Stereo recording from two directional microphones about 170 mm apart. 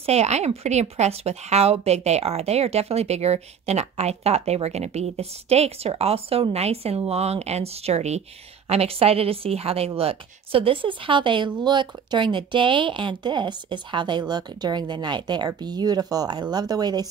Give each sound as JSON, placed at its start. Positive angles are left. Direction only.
{"t": 0.0, "sound": "a woman's voice", "side_deg": -40}